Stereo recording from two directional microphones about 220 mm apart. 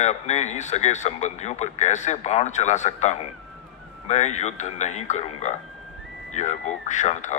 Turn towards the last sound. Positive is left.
turn(degrees=30)  # may be behind; listen again after turning